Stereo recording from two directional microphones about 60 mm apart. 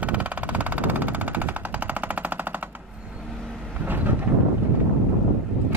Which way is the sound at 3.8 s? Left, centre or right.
Right.